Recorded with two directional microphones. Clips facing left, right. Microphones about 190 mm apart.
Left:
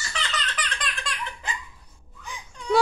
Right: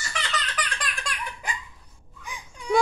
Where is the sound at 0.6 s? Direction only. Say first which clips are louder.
Right 1 dB; 10° right (ahead or behind).